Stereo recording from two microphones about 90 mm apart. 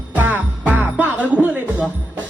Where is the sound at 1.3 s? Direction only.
15° right (ahead or behind).